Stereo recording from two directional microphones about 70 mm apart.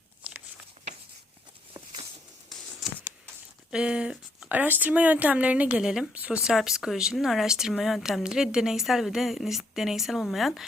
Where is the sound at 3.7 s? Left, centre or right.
Centre.